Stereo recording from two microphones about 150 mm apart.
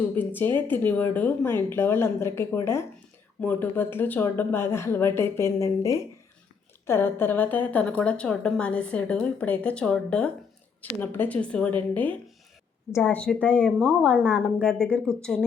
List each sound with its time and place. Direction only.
0.3 s a woman's voice: 15° left (ahead or behind)
12.9 s a woman's voice: 10° left (ahead or behind)